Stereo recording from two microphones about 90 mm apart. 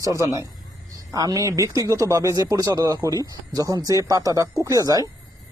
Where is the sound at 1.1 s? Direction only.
40° right (ahead or behind).